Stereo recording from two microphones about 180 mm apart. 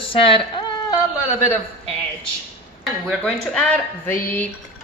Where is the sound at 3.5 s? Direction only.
10° left (ahead or behind).